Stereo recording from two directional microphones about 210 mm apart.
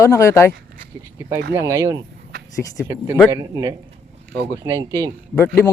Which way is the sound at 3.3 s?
15° right (ahead or behind).